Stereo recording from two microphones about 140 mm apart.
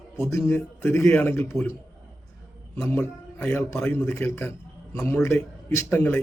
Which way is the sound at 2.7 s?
15° left (ahead or behind).